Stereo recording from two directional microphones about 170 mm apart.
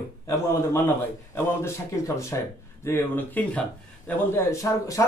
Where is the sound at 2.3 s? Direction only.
20° left (ahead or behind).